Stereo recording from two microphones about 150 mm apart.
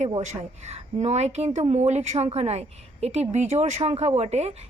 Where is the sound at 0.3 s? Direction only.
50° right (ahead or behind).